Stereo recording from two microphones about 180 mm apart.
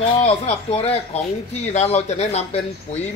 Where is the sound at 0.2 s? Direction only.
35° left (ahead or behind).